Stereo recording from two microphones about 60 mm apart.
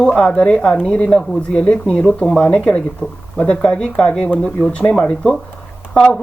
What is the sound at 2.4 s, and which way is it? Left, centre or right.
Speech, left.